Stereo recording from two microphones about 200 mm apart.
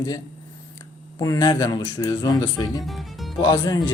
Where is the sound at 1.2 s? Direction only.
15° left (ahead or behind).